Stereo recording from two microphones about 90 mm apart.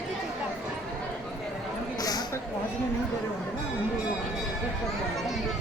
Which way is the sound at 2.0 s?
45° left (ahead or behind).